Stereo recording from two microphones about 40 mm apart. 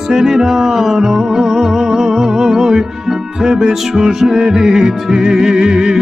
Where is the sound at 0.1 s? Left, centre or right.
Centre.